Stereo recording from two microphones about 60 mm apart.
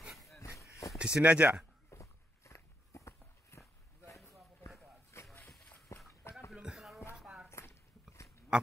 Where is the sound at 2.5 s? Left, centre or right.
Left.